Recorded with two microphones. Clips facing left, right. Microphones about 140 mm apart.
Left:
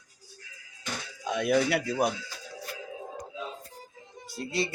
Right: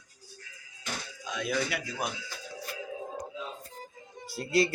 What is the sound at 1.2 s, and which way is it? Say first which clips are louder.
Speech: left 7 dB; 60° left (ahead or behind).